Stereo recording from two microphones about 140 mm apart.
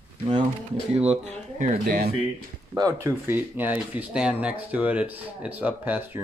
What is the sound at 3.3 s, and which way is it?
Speech, 10° right (ahead or behind).